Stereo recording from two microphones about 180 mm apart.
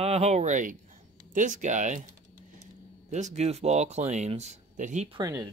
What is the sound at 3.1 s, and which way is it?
Speech, 40° right (ahead or behind).